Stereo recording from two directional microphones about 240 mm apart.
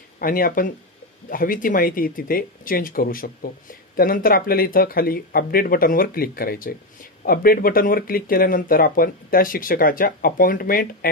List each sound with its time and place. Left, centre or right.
0.2 s speech: left